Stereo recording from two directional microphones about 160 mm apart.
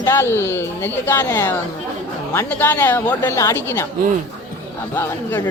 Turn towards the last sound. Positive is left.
turn(degrees=15)  # may be behind; listen again after turning